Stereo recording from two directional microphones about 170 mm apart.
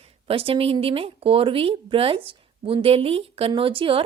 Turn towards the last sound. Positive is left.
turn(degrees=-30)  # may be behind; listen again after turning